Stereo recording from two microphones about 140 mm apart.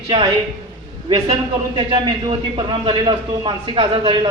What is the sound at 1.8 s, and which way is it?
Speech, 35° right (ahead or behind).